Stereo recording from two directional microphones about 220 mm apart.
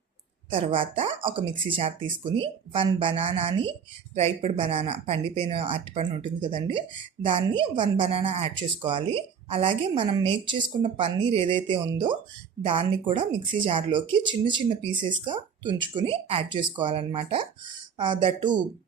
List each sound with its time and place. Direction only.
0.5 s speech: 25° right (ahead or behind)